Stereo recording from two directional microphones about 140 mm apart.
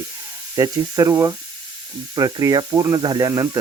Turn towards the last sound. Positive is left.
turn(degrees=-30)  # may be behind; listen again after turning